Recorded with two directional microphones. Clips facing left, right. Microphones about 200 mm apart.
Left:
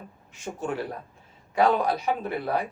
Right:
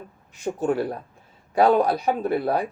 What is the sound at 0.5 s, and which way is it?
Speech, 35° right (ahead or behind).